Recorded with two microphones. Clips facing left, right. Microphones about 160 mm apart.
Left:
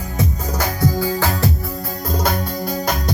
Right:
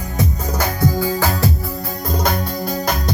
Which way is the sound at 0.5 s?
60° right (ahead or behind).